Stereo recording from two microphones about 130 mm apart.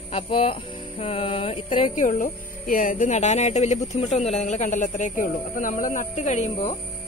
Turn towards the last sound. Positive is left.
turn(degrees=60)  # may be behind; listen again after turning